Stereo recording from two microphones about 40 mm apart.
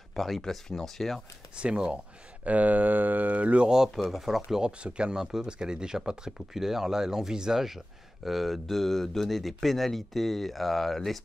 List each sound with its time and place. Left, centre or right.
0.1 s speech: centre
1.6 s speech: right
2.4 s speech: right
3.6 s speech: centre
4.6 s speech: right; by 8.5 s centre
8.6 s speech: centre